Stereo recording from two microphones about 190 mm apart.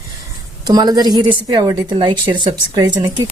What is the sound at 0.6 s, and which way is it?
Speech, 20° right (ahead or behind).